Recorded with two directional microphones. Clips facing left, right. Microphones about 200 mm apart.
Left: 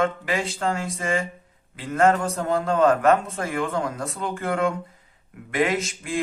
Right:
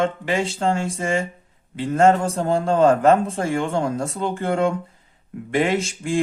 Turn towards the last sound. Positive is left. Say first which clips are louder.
# right 4 dB
turn(degrees=-30)  # may be behind; listen again after turning